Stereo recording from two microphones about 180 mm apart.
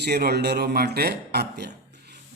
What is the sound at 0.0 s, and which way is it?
Speech, 65° right (ahead or behind).